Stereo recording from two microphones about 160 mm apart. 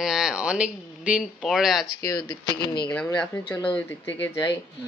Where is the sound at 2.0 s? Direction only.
25° left (ahead or behind).